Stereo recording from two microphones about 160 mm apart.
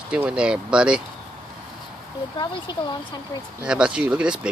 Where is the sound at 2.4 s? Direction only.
25° left (ahead or behind).